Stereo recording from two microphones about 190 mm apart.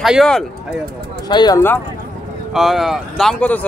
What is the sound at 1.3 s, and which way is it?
Speech, 20° left (ahead or behind).